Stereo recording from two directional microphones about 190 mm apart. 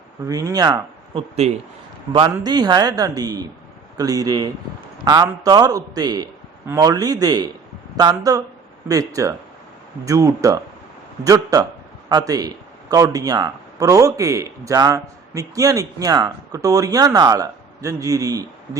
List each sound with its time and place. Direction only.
0.3 s speech: 20° right (ahead or behind)
1.4 s speech: 35° right (ahead or behind)
2.1 s a man's voice: 20° right (ahead or behind)